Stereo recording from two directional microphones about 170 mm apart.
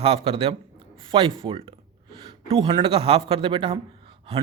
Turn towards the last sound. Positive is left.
turn(degrees=-30)  # may be behind; listen again after turning